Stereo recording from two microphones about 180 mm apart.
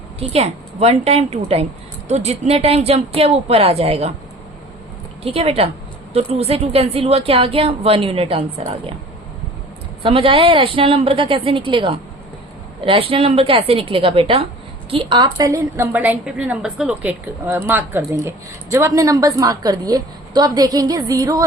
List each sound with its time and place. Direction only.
0.2 s a woman's voice: 35° right (ahead or behind)
5.2 s a woman's voice: 35° right (ahead or behind)
10.0 s a woman's voice: 30° right (ahead or behind)